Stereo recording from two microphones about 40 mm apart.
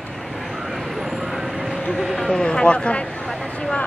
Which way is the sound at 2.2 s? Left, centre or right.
Centre.